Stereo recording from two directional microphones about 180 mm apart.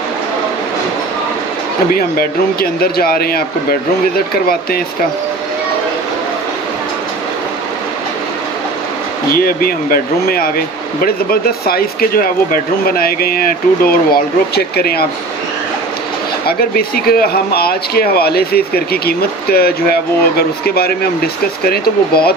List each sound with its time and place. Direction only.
2.0 s speech: 55° left (ahead or behind)
9.3 s speech: 55° left (ahead or behind)
16.4 s speech: 60° left (ahead or behind)